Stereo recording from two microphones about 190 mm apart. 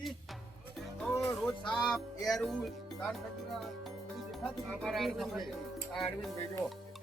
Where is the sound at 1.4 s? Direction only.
Centre (ahead or behind).